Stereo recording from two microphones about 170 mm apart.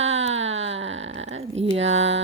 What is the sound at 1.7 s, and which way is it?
Speech, 90° right.